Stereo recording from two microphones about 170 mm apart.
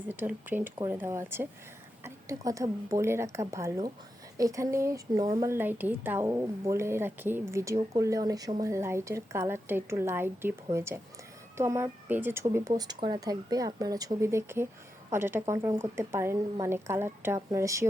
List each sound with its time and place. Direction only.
0.1 s a woman's voice: 10° right (ahead or behind)